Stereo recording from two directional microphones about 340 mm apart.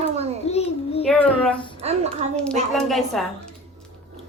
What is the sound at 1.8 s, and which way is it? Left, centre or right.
Speech, centre.